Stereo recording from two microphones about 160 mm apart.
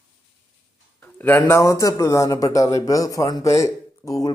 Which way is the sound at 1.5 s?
20° left (ahead or behind).